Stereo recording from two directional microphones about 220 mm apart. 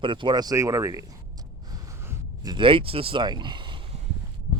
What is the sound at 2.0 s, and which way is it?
Speech, 20° right (ahead or behind).